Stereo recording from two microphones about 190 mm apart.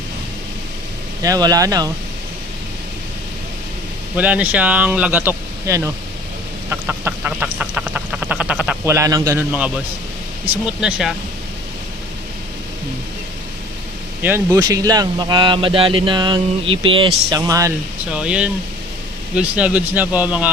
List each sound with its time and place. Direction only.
1.2 s a man's voice: 20° right (ahead or behind)
4.2 s speech: 5° right (ahead or behind)
6.7 s duck: 10° right (ahead or behind)
10.5 s speech: 5° right (ahead or behind)
14.2 s a man's voice: 10° right (ahead or behind)
18.1 s speech: 5° right (ahead or behind)